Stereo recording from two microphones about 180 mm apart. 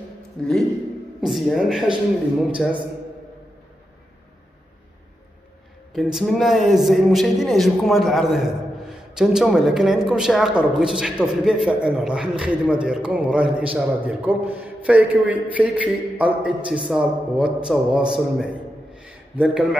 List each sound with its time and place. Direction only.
0.4 s a man's voice: 5° left (ahead or behind)
5.9 s a man's voice: centre (ahead or behind)
18.9 s a sound: 5° right (ahead or behind)